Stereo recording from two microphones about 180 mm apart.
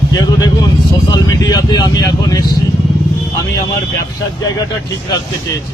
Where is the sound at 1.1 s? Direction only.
20° left (ahead or behind).